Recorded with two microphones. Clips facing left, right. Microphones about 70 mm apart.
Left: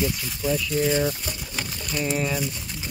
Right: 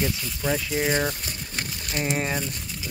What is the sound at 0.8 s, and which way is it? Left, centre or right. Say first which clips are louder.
Speech: left 2 dB; right.